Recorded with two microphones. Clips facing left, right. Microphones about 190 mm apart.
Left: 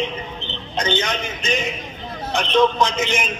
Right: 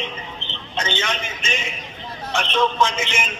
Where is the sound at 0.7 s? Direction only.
35° left (ahead or behind).